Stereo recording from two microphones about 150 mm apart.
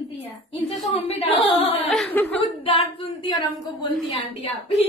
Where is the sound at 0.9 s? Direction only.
45° left (ahead or behind).